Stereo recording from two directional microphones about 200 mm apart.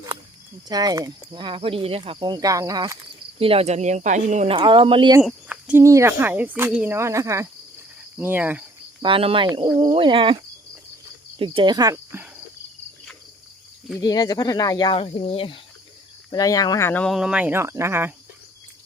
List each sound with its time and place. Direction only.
0.7 s speech: 20° right (ahead or behind)
5.2 s speech: 5° right (ahead or behind)
9.0 s speech: 25° right (ahead or behind)
14.0 s speech: 20° left (ahead or behind); by 18.1 s 10° right (ahead or behind)